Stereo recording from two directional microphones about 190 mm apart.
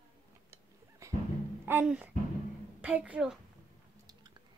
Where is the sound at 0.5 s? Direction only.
15° right (ahead or behind).